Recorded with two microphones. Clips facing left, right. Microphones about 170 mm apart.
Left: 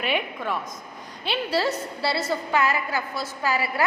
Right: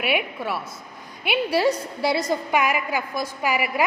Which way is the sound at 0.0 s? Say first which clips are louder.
Right 2 dB; 10° right (ahead or behind).